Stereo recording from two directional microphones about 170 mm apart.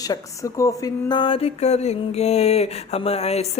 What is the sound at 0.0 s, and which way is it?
Speech, 20° left (ahead or behind).